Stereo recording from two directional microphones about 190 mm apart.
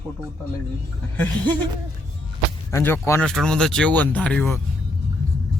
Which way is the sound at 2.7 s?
15° left (ahead or behind).